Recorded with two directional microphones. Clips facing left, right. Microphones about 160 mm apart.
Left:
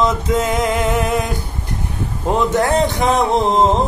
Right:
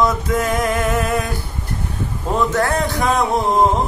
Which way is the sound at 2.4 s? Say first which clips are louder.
Left 3 dB; 20° left (ahead or behind).